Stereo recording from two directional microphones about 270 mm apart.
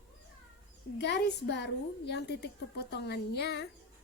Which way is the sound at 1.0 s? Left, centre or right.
Left.